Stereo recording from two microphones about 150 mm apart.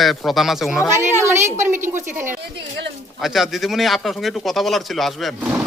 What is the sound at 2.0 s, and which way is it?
Speech, 15° right (ahead or behind).